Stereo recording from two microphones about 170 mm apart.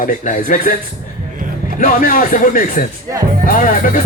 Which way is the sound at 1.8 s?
50° left (ahead or behind).